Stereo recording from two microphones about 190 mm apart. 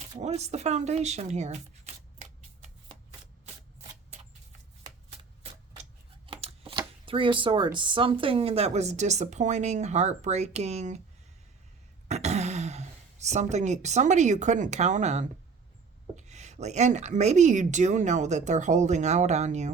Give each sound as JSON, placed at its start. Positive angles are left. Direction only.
{"t": 0.2, "sound": "speech", "side_deg": -35}
{"t": 6.2, "sound": "speech", "side_deg": -30}
{"t": 12.0, "sound": "speech", "side_deg": -35}